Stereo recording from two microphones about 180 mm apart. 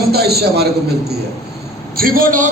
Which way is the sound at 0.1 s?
60° right (ahead or behind).